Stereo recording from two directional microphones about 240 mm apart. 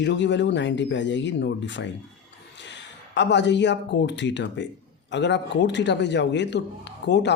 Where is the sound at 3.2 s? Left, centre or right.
Left.